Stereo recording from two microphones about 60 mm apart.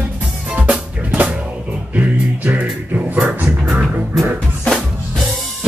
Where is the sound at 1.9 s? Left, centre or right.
Right.